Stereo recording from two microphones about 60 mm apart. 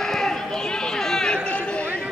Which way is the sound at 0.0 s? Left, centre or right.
Centre.